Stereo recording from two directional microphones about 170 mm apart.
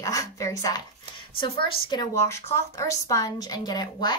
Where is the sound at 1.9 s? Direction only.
20° left (ahead or behind).